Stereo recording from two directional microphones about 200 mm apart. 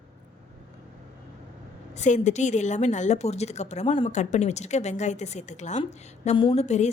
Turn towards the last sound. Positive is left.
turn(degrees=35)  # may be behind; listen again after turning